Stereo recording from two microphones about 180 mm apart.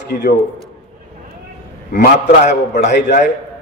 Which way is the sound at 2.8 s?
75° left (ahead or behind).